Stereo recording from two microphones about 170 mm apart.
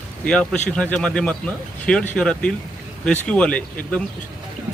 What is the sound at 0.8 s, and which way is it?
Speech, 5° left (ahead or behind).